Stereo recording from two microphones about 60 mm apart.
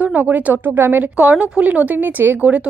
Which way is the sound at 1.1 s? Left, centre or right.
Right.